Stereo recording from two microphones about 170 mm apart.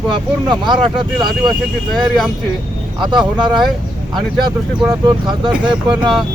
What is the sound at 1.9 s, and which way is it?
Speech, centre (ahead or behind).